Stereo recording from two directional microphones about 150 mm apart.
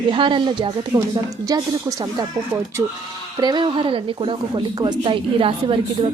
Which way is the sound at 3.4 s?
30° right (ahead or behind).